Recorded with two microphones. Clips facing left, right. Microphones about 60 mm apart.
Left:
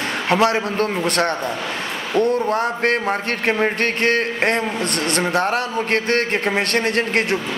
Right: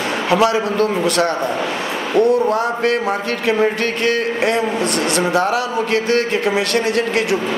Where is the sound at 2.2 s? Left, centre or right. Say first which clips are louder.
Right 4 dB; left.